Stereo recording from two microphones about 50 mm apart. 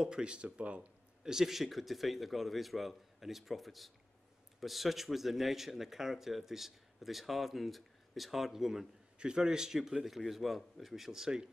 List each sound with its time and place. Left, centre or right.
0.0 s speech: centre
1.2 s a man's voice: centre